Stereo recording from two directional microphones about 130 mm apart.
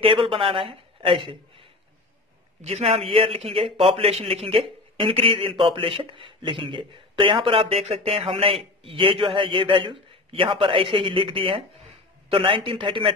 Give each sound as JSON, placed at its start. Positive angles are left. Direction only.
{"t": 0.0, "sound": "a man's voice", "side_deg": -40}